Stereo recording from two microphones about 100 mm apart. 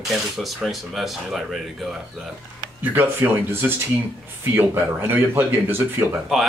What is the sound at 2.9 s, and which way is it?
Speech, 20° right (ahead or behind).